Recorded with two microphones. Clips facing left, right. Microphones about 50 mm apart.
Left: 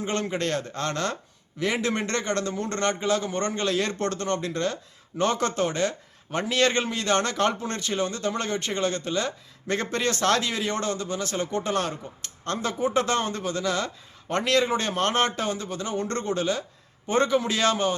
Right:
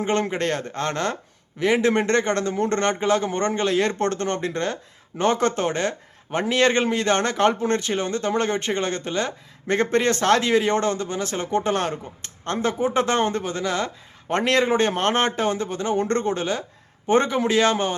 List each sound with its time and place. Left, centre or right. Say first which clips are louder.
0.0 s a man's voice: right 5 dB; right